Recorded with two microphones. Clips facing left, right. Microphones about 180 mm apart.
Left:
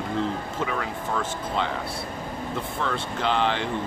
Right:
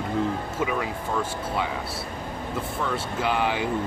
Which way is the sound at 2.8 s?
10° right (ahead or behind).